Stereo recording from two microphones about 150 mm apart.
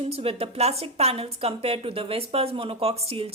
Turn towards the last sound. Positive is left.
turn(degrees=-40)  # may be behind; listen again after turning